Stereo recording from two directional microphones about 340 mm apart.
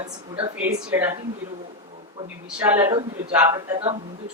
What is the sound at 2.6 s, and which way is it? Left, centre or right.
Speech, centre.